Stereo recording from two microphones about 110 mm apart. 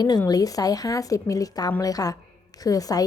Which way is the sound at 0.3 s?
35° left (ahead or behind).